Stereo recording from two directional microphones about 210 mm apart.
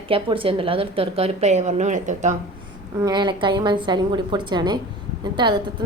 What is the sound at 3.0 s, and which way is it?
A woman's voice, 20° right (ahead or behind).